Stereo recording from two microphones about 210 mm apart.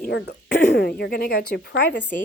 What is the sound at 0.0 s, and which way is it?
Speech, 50° left (ahead or behind).